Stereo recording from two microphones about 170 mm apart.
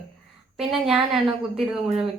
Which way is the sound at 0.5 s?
Centre (ahead or behind).